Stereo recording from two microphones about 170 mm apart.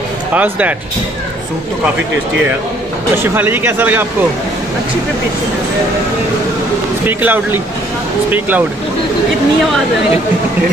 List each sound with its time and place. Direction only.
0.3 s speech: 10° right (ahead or behind)
3.2 s speech: 10° right (ahead or behind)
7.1 s speech: 10° right (ahead or behind)